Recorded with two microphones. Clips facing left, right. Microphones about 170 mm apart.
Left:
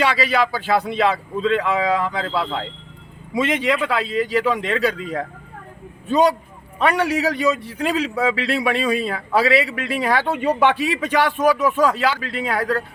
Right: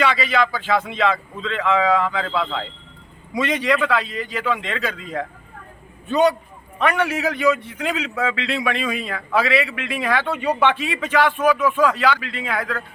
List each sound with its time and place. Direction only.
0.0 s a man's voice: 35° left (ahead or behind)
6.7 s a man's voice: 35° left (ahead or behind)